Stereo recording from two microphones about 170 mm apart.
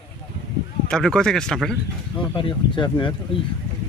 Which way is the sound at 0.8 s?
5° left (ahead or behind).